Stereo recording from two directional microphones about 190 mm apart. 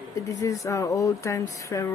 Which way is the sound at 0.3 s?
15° left (ahead or behind).